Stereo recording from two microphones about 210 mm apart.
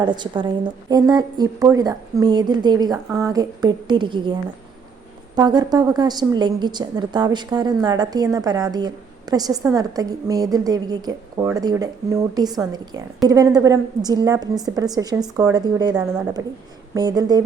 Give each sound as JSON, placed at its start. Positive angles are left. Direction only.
{"t": 0.0, "sound": "a woman's voice", "side_deg": -20}
{"t": 5.4, "sound": "a woman's voice", "side_deg": -20}